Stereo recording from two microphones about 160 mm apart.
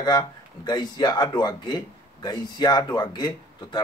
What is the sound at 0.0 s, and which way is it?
Speech, 25° left (ahead or behind).